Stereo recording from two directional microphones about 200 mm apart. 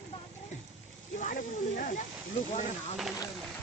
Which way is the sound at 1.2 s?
40° left (ahead or behind).